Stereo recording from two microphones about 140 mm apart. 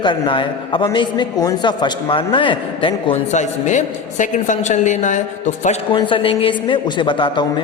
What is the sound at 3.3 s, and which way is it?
A woman's voice, 60° left (ahead or behind).